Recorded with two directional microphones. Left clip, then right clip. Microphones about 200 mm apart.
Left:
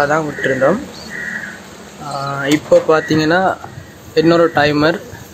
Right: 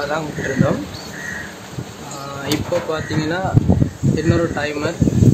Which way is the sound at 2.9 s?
35° left (ahead or behind).